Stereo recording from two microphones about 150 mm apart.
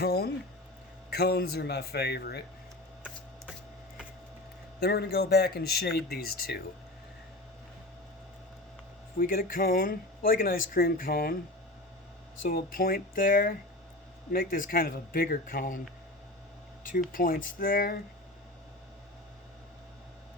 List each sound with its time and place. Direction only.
0.0 s a sound: 90° left
1.1 s a man's voice: 90° left
4.8 s a man's voice: 90° left
9.1 s speech: 70° left (ahead or behind)
12.4 s speech: 75° left (ahead or behind)
16.8 s speech: 65° left (ahead or behind)